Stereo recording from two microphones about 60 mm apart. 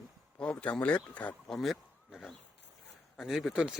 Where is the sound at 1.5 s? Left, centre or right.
Centre.